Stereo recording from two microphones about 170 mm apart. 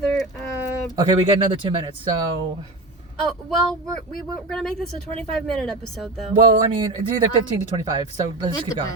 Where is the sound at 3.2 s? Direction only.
Centre (ahead or behind).